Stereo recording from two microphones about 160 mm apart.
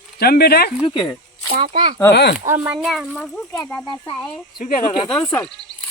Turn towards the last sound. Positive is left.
turn(degrees=10)  # may be behind; listen again after turning